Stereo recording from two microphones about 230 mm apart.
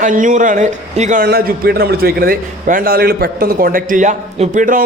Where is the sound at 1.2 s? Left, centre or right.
Right.